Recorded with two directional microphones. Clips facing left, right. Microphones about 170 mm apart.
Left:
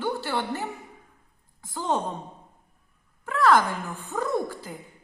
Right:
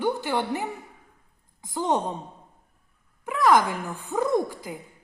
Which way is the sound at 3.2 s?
15° right (ahead or behind).